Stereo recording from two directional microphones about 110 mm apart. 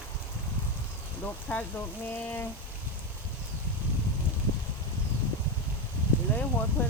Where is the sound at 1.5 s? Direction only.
15° left (ahead or behind).